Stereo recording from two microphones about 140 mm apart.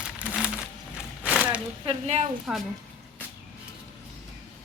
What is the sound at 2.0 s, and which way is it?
Speech, 50° right (ahead or behind).